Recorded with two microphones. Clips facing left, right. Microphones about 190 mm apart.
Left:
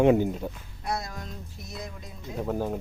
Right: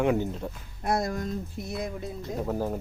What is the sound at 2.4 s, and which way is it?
Speech, 5° right (ahead or behind).